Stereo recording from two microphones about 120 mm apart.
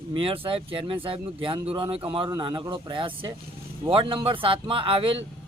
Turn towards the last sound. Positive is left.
turn(degrees=-45)  # may be behind; listen again after turning